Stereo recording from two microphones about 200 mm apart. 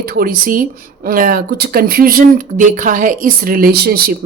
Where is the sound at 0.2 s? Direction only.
45° right (ahead or behind).